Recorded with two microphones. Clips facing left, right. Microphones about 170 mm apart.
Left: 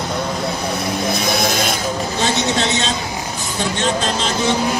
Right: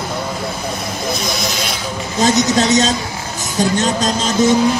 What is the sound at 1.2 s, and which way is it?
Vehicle, 55° left (ahead or behind).